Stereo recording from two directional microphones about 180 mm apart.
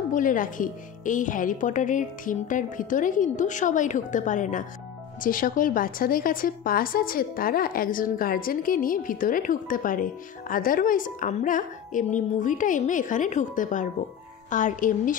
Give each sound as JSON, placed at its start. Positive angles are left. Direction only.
{"t": 0.1, "sound": "a woman's voice", "side_deg": 50}